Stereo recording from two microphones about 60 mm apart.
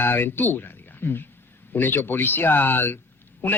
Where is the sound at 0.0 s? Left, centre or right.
Left.